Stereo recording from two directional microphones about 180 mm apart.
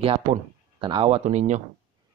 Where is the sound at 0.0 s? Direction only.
30° right (ahead or behind).